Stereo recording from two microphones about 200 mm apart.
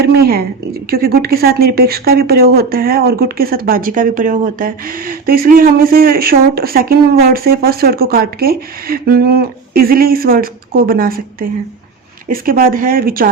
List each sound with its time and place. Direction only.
0.1 s speech: 50° right (ahead or behind)